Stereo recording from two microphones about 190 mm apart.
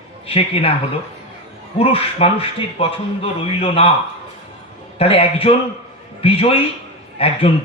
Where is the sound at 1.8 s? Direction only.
30° left (ahead or behind).